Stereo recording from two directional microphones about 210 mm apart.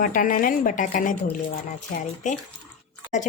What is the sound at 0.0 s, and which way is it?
A woman's voice, 40° left (ahead or behind).